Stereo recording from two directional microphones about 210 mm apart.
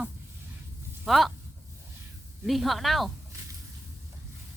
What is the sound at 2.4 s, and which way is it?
Speech, centre (ahead or behind).